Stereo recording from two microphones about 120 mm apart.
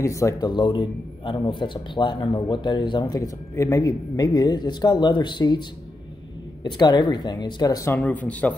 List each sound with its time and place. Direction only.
0.0 s speech: 25° left (ahead or behind)
0.5 s a man's voice: 40° left (ahead or behind)
3.2 s a man's voice: 25° left (ahead or behind)
8.0 s speech: 10° left (ahead or behind)